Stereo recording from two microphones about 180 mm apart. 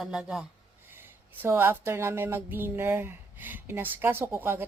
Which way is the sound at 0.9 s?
10° right (ahead or behind).